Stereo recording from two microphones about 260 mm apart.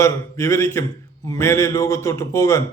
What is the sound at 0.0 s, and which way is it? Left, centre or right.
A man's voice, centre.